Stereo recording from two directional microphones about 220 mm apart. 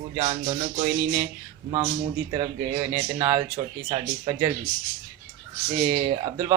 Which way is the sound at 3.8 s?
20° right (ahead or behind).